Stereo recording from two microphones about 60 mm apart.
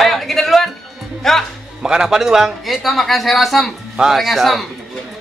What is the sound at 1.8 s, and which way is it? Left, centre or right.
Speech, centre.